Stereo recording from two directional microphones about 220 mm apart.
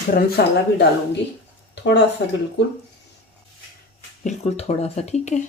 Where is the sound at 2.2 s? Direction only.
55° left (ahead or behind).